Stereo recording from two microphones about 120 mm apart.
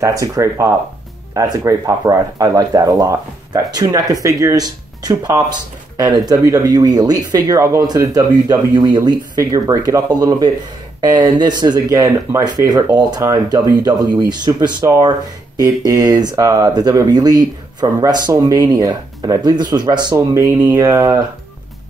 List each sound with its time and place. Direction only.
0.0 s speech: 25° right (ahead or behind)
20.3 s speech: 25° right (ahead or behind)